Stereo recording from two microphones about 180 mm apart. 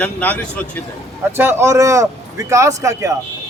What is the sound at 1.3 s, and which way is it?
A man's voice, 15° right (ahead or behind).